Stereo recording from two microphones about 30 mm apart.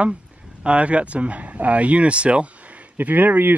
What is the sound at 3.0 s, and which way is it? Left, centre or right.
Speech, right.